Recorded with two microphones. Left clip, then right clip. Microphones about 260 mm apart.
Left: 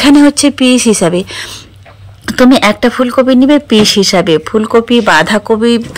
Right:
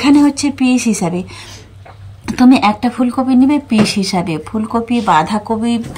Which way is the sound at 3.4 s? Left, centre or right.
Centre.